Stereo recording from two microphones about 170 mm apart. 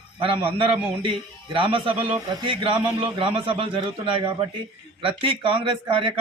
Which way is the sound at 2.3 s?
30° right (ahead or behind).